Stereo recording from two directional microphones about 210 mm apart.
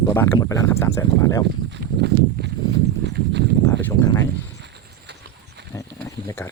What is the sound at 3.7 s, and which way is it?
Speech, 15° left (ahead or behind).